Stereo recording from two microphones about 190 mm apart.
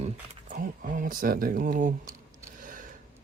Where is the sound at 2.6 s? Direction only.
45° right (ahead or behind).